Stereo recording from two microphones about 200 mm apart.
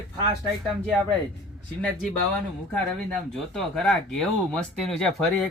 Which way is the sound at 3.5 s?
Centre (ahead or behind).